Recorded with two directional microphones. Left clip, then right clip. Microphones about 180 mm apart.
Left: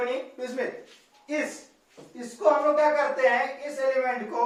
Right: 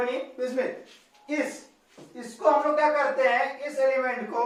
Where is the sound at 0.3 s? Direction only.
15° right (ahead or behind).